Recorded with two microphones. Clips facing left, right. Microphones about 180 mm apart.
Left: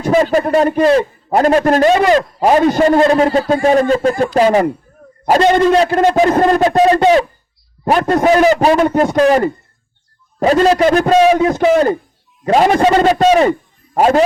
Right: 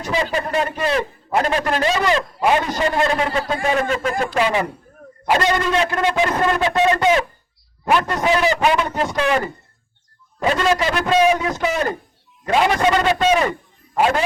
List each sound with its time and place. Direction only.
0.0 s a man's voice: 45° left (ahead or behind)
7.9 s a man's voice: 45° left (ahead or behind)
10.4 s a man's voice: 40° left (ahead or behind)
12.5 s a man's voice: 40° left (ahead or behind)